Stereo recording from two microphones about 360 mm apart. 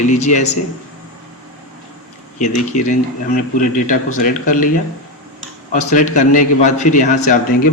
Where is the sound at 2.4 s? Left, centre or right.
Left.